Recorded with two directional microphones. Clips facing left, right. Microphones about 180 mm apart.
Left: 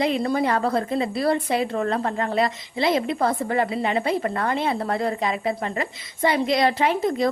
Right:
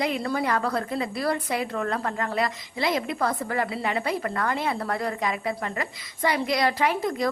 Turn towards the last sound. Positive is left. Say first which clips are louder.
# left 4 dB
turn(degrees=25)  # may be behind; listen again after turning